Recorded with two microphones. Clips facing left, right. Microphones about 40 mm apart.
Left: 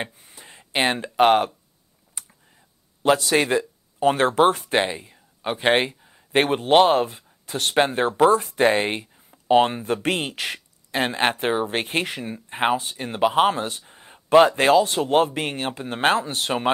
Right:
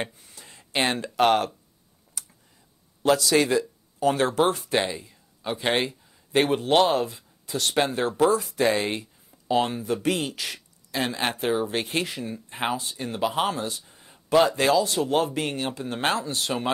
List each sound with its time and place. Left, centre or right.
0.0 s speech: left
2.2 s computer keyboard: left
3.0 s speech: left